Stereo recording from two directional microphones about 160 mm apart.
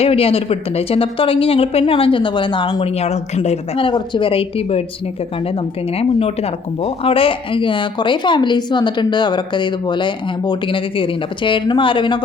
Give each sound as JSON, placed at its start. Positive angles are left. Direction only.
{"t": 0.0, "sound": "speech", "side_deg": 35}
{"t": 6.0, "sound": "speech", "side_deg": 40}